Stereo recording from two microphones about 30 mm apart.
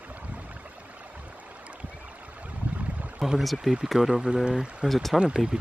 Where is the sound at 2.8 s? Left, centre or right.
Right.